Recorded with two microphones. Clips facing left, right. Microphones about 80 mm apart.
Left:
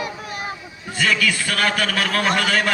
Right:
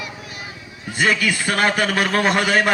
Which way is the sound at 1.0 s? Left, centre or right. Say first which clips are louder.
Right 1 dB; right.